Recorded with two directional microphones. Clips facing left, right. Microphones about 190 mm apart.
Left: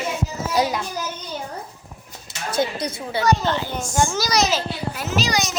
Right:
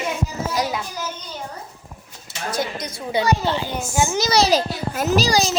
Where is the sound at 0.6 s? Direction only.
30° left (ahead or behind).